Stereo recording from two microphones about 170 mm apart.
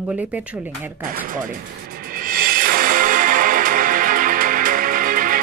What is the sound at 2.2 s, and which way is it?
Music, 60° right (ahead or behind).